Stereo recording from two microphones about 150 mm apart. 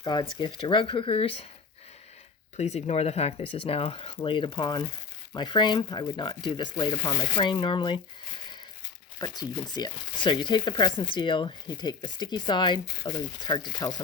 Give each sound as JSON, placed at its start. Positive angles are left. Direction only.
{"t": 0.0, "sound": "speech", "side_deg": 30}
{"t": 2.6, "sound": "speech", "side_deg": 45}
{"t": 9.1, "sound": "speech", "side_deg": 25}